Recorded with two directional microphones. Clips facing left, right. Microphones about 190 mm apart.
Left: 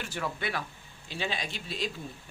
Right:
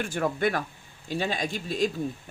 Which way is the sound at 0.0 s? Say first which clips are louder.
Right 8 dB; 50° right (ahead or behind).